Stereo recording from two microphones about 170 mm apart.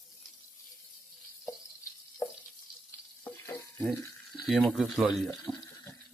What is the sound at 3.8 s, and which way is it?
Water, centre (ahead or behind).